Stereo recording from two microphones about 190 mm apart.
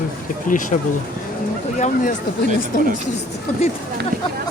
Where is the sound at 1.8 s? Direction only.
45° left (ahead or behind).